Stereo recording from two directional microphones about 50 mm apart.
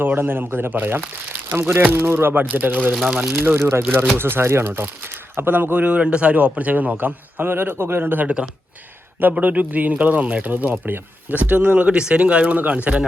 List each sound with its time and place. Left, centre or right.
0.0 s speech: right
1.5 s a man's voice: right
3.2 s a man's voice: right
9.4 s a man's voice: right
10.5 s a man's voice: right
11.9 s speech: right